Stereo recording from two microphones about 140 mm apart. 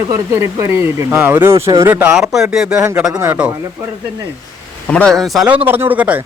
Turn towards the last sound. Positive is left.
turn(degrees=-10)  # may be behind; listen again after turning